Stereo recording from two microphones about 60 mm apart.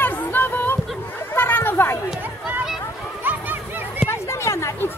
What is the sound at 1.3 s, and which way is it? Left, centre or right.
Chatter, left.